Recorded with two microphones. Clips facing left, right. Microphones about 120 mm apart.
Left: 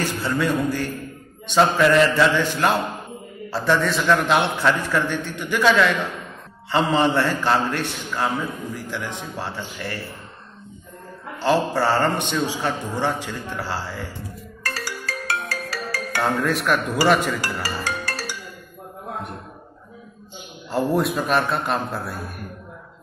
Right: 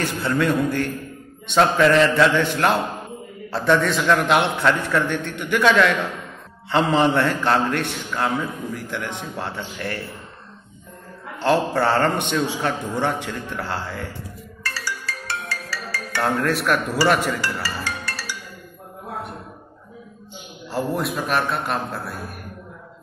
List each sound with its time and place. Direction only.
0.0 s a man's voice: 5° left (ahead or behind)
11.3 s a man's voice: 5° left (ahead or behind)
14.6 s music: 45° left (ahead or behind)
16.2 s a man's voice: 15° left (ahead or behind)
17.6 s music: 45° left (ahead or behind)
20.7 s a man's voice: centre (ahead or behind)